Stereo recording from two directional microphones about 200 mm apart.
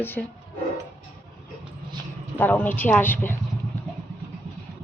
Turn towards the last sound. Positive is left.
turn(degrees=10)  # may be behind; listen again after turning